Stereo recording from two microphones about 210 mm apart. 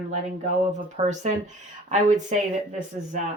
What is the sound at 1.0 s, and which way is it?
Speech, 30° right (ahead or behind).